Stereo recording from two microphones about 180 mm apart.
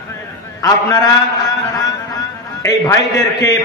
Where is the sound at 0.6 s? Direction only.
20° left (ahead or behind).